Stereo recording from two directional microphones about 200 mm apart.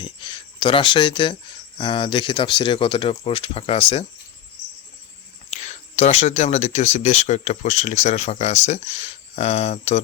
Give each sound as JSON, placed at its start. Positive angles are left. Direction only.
{"t": 0.0, "sound": "speech", "side_deg": 25}
{"t": 5.5, "sound": "speech", "side_deg": 35}